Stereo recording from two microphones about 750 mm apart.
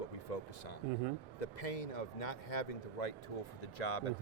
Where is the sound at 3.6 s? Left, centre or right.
Left.